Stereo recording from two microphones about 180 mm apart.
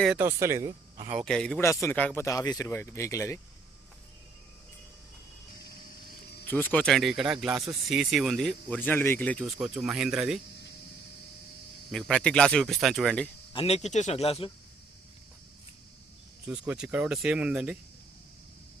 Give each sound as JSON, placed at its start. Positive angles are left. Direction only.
{"t": 0.2, "sound": "speech", "side_deg": -15}
{"t": 1.2, "sound": "speech", "side_deg": 5}
{"t": 1.6, "sound": "speech", "side_deg": 15}
{"t": 6.5, "sound": "speech", "side_deg": 10}
{"t": 8.8, "sound": "speech", "side_deg": 10}
{"t": 11.9, "sound": "speech", "side_deg": 0}
{"t": 13.5, "sound": "speech", "side_deg": 30}
{"t": 16.5, "sound": "speech", "side_deg": -5}